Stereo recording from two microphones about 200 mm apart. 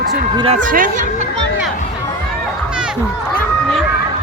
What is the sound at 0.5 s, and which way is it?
Speech, 40° right (ahead or behind).